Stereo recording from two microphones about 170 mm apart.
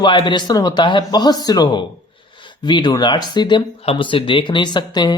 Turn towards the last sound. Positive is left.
turn(degrees=25)  # may be behind; listen again after turning